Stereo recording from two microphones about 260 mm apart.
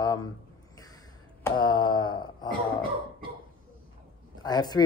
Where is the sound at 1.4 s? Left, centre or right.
Centre.